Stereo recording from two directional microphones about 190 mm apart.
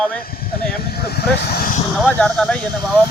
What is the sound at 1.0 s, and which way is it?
Speech, 55° left (ahead or behind).